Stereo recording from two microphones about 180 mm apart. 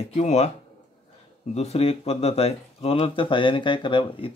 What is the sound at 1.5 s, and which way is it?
Speech, 35° left (ahead or behind).